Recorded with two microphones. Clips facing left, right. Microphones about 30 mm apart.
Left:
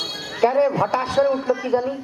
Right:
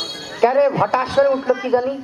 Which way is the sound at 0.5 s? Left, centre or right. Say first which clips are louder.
Right 3 dB; right.